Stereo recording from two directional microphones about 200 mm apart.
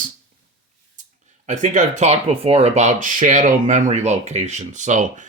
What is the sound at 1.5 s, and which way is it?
Speech, 35° right (ahead or behind).